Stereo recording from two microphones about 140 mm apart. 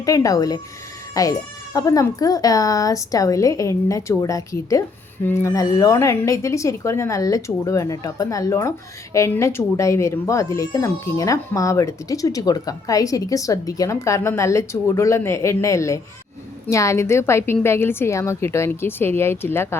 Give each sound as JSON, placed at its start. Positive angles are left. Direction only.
{"t": 0.0, "sound": "a woman's voice", "side_deg": 25}